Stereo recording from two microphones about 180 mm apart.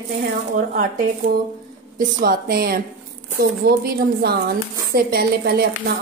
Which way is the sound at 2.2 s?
55° right (ahead or behind).